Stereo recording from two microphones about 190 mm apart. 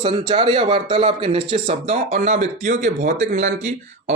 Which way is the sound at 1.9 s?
40° right (ahead or behind).